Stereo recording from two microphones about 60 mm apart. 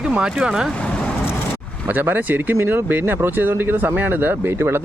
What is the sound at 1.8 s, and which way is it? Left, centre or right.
Speech, right.